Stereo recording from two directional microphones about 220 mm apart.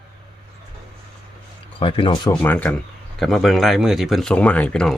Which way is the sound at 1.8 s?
25° left (ahead or behind).